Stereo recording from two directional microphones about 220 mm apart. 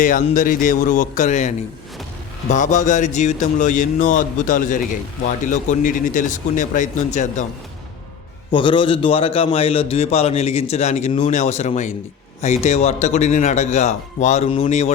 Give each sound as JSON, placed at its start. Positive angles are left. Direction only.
{"t": 0.0, "sound": "speech", "side_deg": 35}
{"t": 8.4, "sound": "a man's voice", "side_deg": 20}